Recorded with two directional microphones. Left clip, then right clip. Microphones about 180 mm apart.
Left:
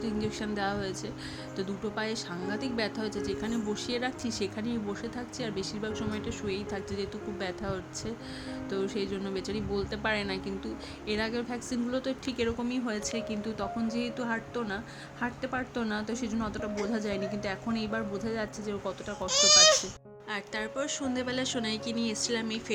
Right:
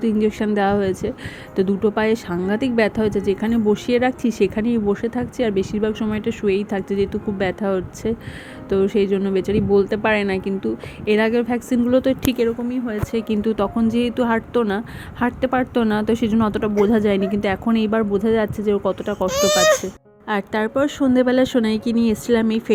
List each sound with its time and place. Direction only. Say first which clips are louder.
0.0 s speech: right 14 dB; 30° right (ahead or behind)
12.5 s speech: right 10 dB; 5° right (ahead or behind)
13.1 s speech: right 14 dB; 35° right (ahead or behind)
19.2 s speech: right 5 dB; 60° right (ahead or behind)
20.2 s speech: right 13 dB; 40° right (ahead or behind)